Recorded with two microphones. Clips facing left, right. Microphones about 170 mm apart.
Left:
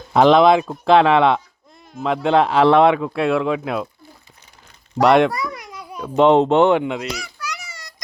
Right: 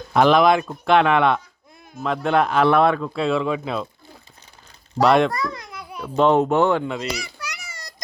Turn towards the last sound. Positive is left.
turn(degrees=-50)  # may be behind; listen again after turning